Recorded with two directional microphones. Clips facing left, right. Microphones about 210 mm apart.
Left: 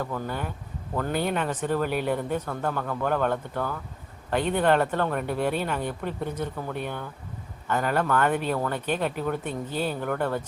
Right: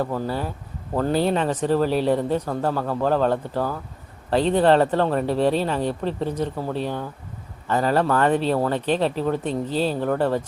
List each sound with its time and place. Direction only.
0.0 s speech: 35° right (ahead or behind)